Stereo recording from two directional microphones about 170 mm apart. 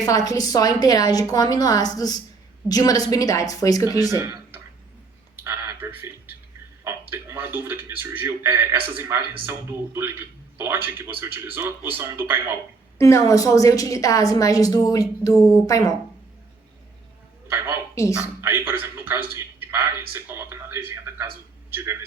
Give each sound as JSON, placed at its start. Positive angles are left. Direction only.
{"t": 0.0, "sound": "a woman's voice", "side_deg": 20}
{"t": 4.1, "sound": "a sound", "side_deg": -15}
{"t": 6.8, "sound": "speech", "side_deg": -15}
{"t": 13.0, "sound": "a woman's voice", "side_deg": 15}
{"t": 18.2, "sound": "a man's voice", "side_deg": -10}